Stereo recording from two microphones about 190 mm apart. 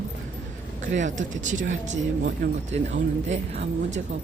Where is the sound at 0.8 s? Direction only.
40° right (ahead or behind).